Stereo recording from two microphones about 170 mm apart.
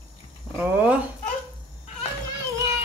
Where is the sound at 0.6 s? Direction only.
10° right (ahead or behind).